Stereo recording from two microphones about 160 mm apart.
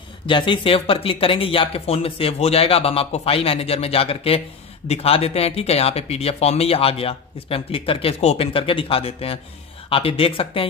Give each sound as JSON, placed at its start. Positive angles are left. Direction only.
{"t": 0.3, "sound": "speech", "side_deg": 35}